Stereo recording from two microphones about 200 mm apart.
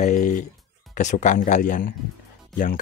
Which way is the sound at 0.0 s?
40° left (ahead or behind).